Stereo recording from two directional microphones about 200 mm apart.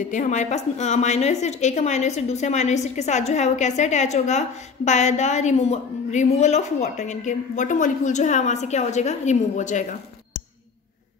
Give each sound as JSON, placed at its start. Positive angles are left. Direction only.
{"t": 0.1, "sound": "a woman's voice", "side_deg": 35}